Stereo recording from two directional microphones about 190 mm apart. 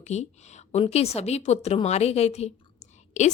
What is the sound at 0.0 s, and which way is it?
A woman's voice, 35° left (ahead or behind).